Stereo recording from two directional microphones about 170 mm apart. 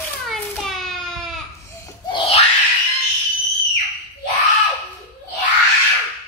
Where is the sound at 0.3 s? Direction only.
Centre (ahead or behind).